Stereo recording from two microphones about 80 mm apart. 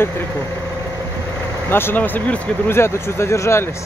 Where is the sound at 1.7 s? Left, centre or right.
Left.